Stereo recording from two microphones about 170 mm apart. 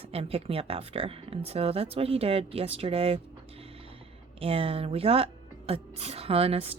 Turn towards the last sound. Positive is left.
turn(degrees=-35)  # may be behind; listen again after turning